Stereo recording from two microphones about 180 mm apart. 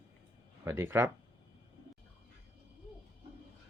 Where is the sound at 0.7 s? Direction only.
15° right (ahead or behind).